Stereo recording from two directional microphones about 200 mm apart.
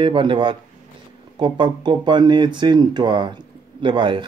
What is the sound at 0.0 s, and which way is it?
Speech, 25° right (ahead or behind).